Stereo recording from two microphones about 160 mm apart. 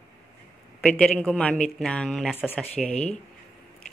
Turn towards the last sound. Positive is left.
turn(degrees=5)  # may be behind; listen again after turning